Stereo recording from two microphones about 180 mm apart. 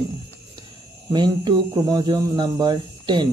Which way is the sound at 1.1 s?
25° right (ahead or behind).